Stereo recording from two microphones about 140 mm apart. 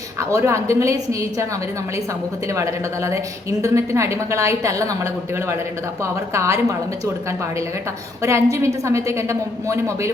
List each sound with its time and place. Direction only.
0.2 s a woman's voice: 20° right (ahead or behind)
2.5 s a woman's voice: 20° right (ahead or behind)